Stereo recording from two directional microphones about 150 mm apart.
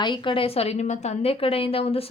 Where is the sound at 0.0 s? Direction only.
30° left (ahead or behind).